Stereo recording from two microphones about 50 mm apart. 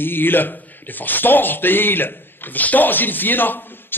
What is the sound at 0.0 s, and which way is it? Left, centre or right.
A man's voice, left.